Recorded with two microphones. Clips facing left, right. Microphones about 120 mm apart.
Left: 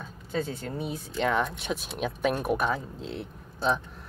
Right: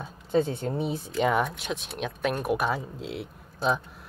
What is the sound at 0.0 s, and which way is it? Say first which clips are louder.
Speech: right 6 dB; 25° right (ahead or behind).